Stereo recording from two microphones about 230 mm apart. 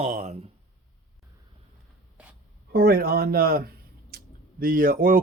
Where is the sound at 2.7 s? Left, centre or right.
Right.